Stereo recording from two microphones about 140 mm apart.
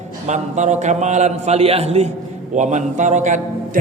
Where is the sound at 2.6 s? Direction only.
60° right (ahead or behind).